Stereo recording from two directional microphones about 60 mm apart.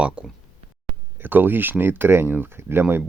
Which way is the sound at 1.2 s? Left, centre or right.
Right.